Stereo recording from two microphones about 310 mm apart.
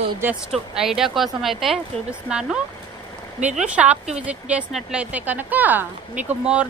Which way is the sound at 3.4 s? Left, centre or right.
Centre.